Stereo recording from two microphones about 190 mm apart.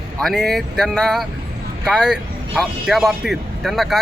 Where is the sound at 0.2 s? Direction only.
Centre (ahead or behind).